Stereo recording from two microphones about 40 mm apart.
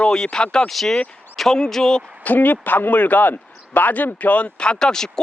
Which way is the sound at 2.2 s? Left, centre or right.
Left.